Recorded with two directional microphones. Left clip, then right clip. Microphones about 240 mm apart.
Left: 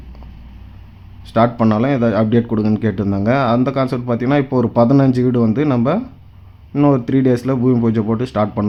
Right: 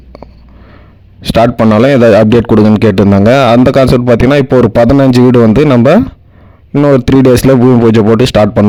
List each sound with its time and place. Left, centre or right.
1.2 s a man's voice: right
7.0 s a man's voice: right